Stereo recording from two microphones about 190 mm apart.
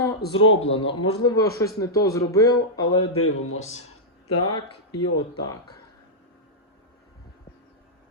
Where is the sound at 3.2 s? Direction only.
90° left.